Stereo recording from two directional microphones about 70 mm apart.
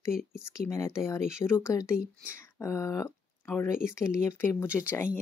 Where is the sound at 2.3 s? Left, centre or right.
Left.